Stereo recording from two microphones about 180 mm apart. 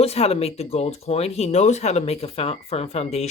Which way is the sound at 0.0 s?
35° left (ahead or behind).